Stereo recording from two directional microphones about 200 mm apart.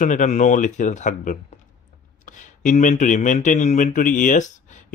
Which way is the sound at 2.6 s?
40° left (ahead or behind).